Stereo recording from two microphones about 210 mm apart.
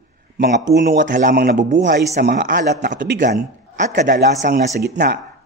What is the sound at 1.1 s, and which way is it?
Speech, 40° right (ahead or behind).